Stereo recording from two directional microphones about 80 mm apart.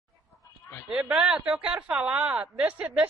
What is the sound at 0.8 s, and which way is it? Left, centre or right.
Speech, centre.